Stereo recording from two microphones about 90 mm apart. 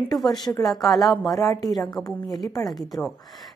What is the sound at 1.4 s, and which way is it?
Speech, 40° left (ahead or behind).